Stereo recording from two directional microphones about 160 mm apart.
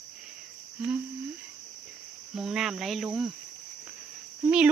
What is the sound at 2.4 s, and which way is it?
Speech, 5° right (ahead or behind).